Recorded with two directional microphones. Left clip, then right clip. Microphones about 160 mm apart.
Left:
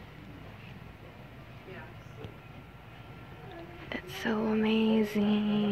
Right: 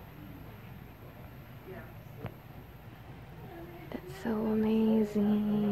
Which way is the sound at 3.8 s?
10° right (ahead or behind).